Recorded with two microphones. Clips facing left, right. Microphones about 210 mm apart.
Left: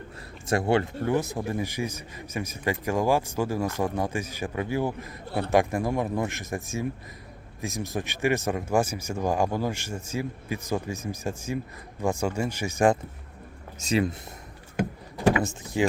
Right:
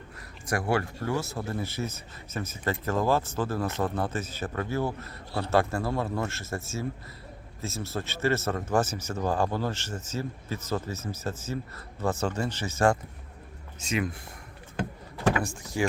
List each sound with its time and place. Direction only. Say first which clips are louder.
0.4 s speech: left 4 dB; 25° left (ahead or behind)
13.7 s speech: left 5 dB; 35° left (ahead or behind)
15.4 s speech: left 3 dB; 20° left (ahead or behind)